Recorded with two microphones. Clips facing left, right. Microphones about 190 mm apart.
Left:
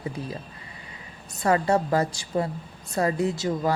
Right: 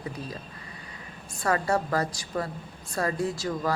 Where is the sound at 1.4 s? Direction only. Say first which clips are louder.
Left 4 dB; 20° left (ahead or behind).